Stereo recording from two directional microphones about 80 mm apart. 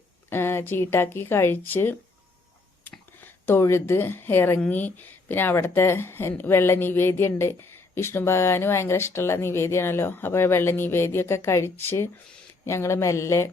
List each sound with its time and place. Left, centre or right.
0.3 s speech: left
3.2 s speech: left